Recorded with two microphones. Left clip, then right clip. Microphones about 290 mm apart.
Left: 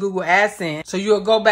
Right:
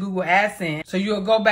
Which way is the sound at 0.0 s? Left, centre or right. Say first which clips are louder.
Left 3 dB; centre.